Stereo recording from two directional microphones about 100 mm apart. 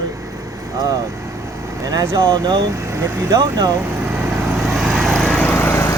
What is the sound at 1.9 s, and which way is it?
Speech, 45° right (ahead or behind).